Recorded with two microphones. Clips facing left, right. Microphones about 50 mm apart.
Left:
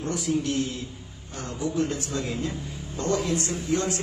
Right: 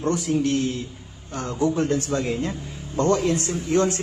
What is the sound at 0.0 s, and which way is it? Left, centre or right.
A man's voice, right.